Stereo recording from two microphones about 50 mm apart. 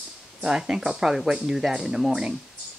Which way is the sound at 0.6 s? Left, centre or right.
Centre.